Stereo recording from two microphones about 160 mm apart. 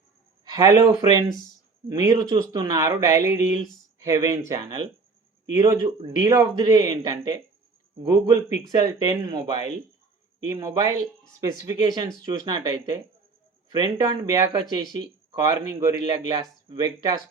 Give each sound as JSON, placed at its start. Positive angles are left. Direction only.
{"t": 0.4, "sound": "speech", "side_deg": -25}
{"t": 10.6, "sound": "speech", "side_deg": -25}